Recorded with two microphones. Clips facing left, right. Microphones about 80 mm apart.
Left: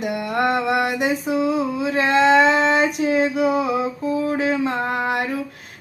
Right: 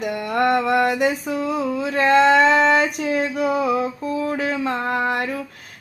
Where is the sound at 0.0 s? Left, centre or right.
Centre.